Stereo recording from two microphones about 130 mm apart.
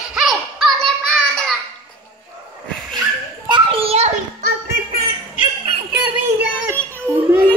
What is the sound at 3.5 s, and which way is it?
Children playing, 45° right (ahead or behind).